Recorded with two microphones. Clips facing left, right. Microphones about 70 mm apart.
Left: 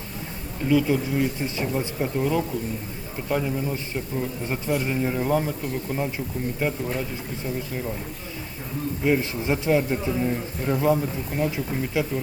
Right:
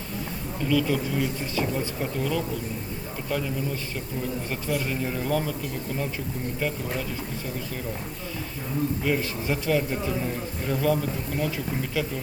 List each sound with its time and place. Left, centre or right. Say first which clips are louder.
0.7 s a man's voice: left 3 dB; centre
9.0 s a man's voice: left 4 dB; left